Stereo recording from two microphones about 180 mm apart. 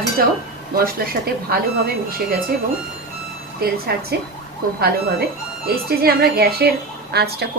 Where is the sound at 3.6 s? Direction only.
60° right (ahead or behind).